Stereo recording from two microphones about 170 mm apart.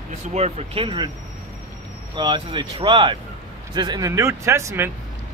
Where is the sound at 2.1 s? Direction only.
30° right (ahead or behind).